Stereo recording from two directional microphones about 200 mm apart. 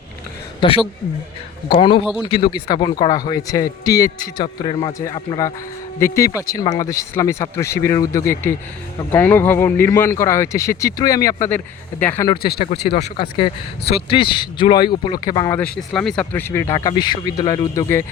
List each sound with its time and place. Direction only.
0.6 s speech: 25° left (ahead or behind)
1.8 s speech: 25° left (ahead or behind)
12.6 s speech: 55° left (ahead or behind)
13.0 s speech: 30° left (ahead or behind)